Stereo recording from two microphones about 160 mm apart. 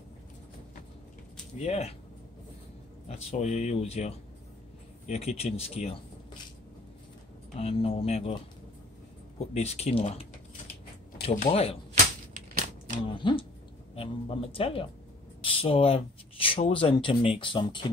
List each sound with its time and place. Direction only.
1.6 s a man's voice: 40° left (ahead or behind)
3.1 s a man's voice: 40° left (ahead or behind)
7.5 s a man's voice: 40° left (ahead or behind)
9.4 s a man's voice: 40° left (ahead or behind)
13.0 s a man's voice: 30° left (ahead or behind)